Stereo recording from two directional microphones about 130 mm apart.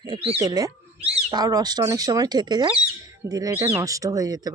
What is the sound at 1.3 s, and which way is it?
Speech, 30° right (ahead or behind).